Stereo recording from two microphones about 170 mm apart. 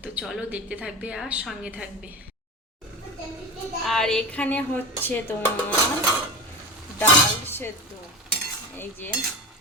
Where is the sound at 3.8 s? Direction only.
5° left (ahead or behind).